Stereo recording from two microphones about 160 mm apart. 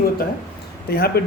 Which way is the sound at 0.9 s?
75° left (ahead or behind).